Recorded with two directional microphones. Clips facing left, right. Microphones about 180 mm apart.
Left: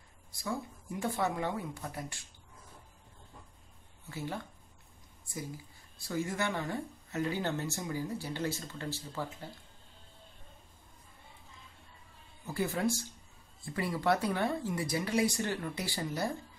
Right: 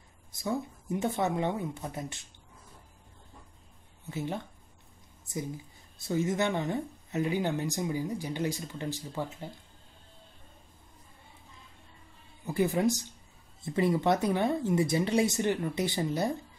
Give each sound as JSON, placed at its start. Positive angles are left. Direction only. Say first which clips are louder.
{"t": 0.3, "sound": "speech", "louder": "right 5 dB", "side_deg": -20}
{"t": 4.1, "sound": "speech", "louder": "right 4 dB", "side_deg": -20}
{"t": 12.4, "sound": "speech", "louder": "right 5 dB", "side_deg": -20}